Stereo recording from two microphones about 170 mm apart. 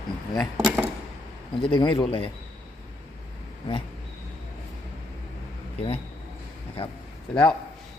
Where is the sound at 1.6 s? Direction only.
30° left (ahead or behind).